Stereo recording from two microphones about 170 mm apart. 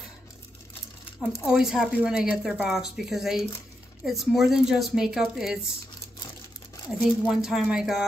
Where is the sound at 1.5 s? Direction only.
5° right (ahead or behind).